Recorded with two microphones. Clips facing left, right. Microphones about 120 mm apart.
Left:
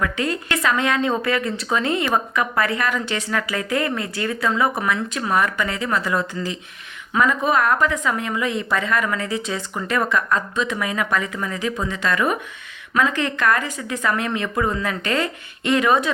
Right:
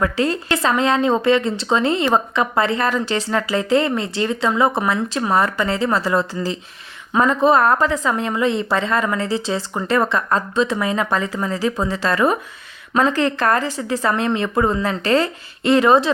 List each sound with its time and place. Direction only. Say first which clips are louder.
0.0 s a woman's voice: right 4 dB; 30° right (ahead or behind)